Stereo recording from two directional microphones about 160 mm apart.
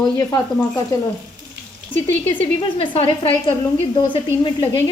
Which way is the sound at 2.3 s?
30° left (ahead or behind).